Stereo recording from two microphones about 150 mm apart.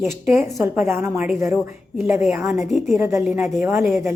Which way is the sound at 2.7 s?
Centre (ahead or behind).